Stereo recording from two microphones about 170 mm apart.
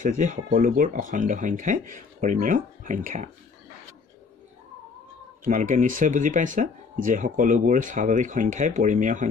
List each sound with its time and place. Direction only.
0.0 s speech: 50° right (ahead or behind)
5.4 s speech: 50° right (ahead or behind)